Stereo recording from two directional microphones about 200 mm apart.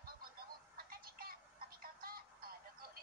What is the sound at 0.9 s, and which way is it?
Music, 45° right (ahead or behind).